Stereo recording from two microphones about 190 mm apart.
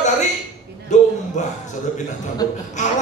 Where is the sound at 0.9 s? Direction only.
40° left (ahead or behind).